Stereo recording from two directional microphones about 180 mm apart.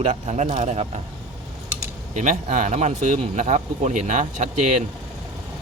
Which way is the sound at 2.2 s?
45° right (ahead or behind).